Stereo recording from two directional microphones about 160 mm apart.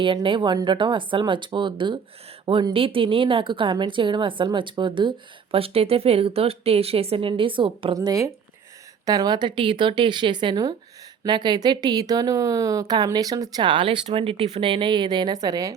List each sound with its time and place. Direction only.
0.0 s a woman's voice: 30° right (ahead or behind)
7.9 s speech: 20° right (ahead or behind)